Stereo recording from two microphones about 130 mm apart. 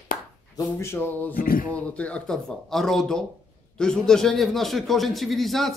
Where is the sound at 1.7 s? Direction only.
10° left (ahead or behind).